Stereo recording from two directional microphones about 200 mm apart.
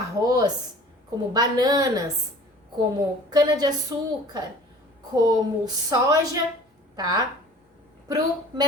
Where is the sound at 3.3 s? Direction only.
20° right (ahead or behind).